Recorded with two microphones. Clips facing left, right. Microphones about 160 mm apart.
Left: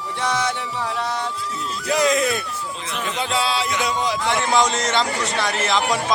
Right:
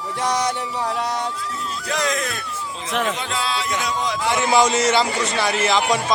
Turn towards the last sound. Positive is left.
turn(degrees=0)  # may be behind; listen again after turning